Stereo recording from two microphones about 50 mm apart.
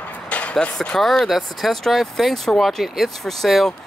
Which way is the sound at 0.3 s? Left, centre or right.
Left.